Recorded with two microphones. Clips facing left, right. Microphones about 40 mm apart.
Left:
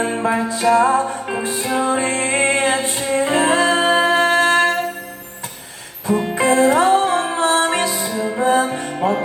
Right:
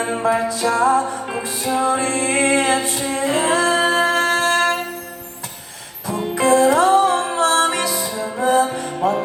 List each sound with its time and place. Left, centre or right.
0.3 s music: left
6.1 s music: left